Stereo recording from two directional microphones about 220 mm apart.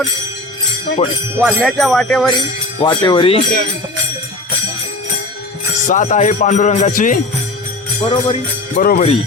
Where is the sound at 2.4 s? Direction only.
20° left (ahead or behind).